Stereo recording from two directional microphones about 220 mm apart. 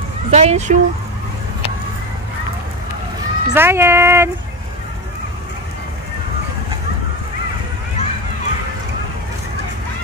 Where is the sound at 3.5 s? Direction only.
10° right (ahead or behind).